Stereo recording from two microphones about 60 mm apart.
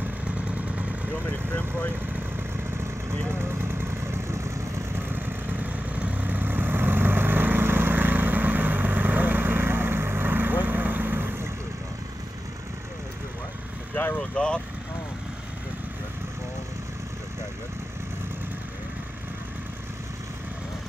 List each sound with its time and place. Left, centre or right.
1.5 s speech: left
3.3 s vehicle: right
5.1 s vehicle: right
13.9 s vehicle: left
14.3 s vehicle: centre